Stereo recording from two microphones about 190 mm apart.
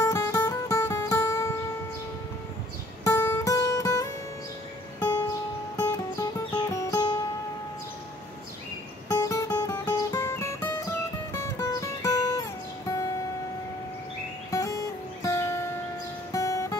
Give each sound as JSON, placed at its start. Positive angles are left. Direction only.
{"t": 0.0, "sound": "music", "side_deg": 15}
{"t": 3.0, "sound": "music", "side_deg": 10}
{"t": 9.1, "sound": "music", "side_deg": 15}
{"t": 14.5, "sound": "music", "side_deg": 15}